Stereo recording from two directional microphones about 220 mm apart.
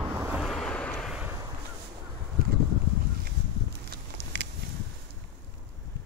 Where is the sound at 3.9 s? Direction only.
50° right (ahead or behind).